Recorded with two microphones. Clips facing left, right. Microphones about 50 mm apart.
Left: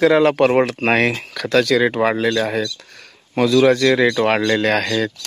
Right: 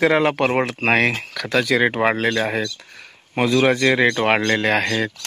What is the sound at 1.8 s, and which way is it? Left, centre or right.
Speech, right.